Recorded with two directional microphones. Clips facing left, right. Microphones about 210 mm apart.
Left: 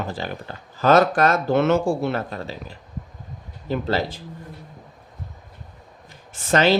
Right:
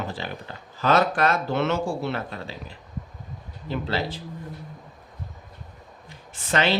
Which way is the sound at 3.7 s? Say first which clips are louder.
Left 4 dB; 45° left (ahead or behind).